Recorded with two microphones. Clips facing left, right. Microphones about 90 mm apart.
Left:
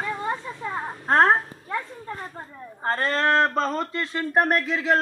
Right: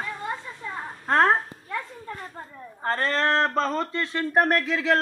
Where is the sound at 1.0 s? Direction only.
20° left (ahead or behind).